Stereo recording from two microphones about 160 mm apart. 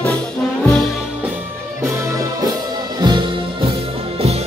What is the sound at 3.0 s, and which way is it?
Music, 25° right (ahead or behind).